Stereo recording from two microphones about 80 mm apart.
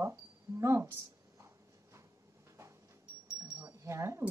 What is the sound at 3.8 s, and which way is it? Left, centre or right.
Speech, right.